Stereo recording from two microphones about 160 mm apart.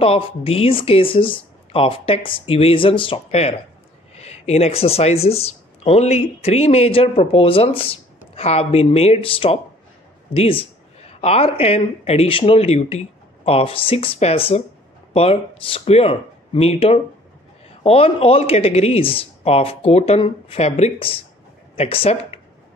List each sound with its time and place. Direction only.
0.0 s speech: 35° left (ahead or behind)